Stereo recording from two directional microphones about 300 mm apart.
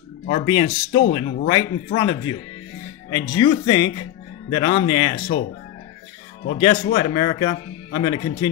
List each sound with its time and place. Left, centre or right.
0.3 s speech: centre
6.9 s speech: centre